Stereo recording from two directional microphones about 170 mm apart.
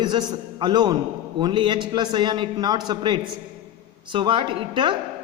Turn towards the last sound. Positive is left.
turn(degrees=-30)  # may be behind; listen again after turning